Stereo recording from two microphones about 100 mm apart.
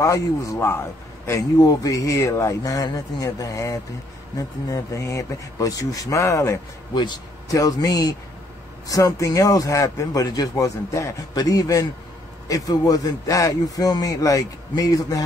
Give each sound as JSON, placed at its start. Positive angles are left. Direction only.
{"t": 0.0, "sound": "a man's voice", "side_deg": 35}
{"t": 1.6, "sound": "speech", "side_deg": 40}
{"t": 6.9, "sound": "a man's voice", "side_deg": 50}
{"t": 7.5, "sound": "speech", "side_deg": 40}